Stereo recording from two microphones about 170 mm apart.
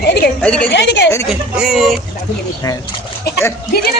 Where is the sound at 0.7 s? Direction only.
90° left.